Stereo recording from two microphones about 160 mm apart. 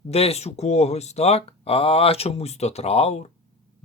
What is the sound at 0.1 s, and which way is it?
Speech, 40° left (ahead or behind).